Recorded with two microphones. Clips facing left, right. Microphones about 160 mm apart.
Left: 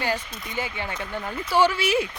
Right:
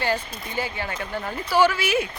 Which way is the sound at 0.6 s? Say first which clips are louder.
Right 1 dB; 20° left (ahead or behind).